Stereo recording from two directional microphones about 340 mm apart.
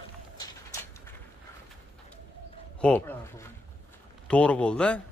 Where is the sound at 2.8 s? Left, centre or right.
Centre.